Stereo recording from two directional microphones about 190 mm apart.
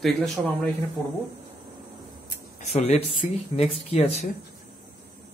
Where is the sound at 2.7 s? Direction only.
35° left (ahead or behind).